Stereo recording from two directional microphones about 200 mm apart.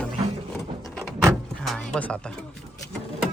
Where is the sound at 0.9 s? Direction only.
Centre (ahead or behind).